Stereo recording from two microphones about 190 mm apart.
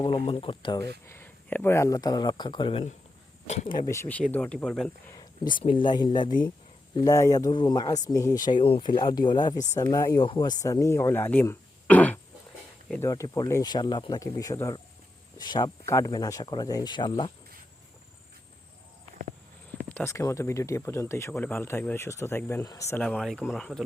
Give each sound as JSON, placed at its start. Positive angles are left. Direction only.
{"t": 0.0, "sound": "speech", "side_deg": 25}
{"t": 1.0, "sound": "speech", "side_deg": 10}
{"t": 3.7, "sound": "speech", "side_deg": 20}
{"t": 5.5, "sound": "speech", "side_deg": 25}
{"t": 19.9, "sound": "speech", "side_deg": 10}